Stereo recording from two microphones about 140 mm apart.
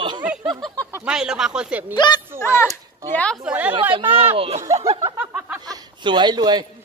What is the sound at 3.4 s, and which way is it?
Speech, 10° right (ahead or behind).